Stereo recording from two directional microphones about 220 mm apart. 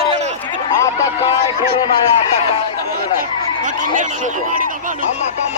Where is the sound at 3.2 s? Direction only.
35° right (ahead or behind).